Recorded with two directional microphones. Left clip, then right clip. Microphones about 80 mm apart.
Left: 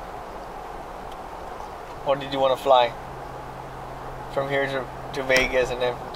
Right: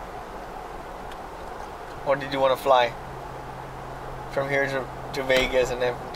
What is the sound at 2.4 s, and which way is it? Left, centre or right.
Speech, centre.